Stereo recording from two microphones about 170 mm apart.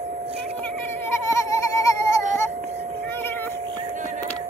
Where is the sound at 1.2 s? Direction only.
20° left (ahead or behind).